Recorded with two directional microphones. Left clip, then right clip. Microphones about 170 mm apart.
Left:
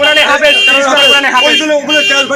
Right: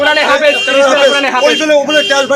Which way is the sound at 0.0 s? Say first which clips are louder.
Left 2 dB; 60° right (ahead or behind).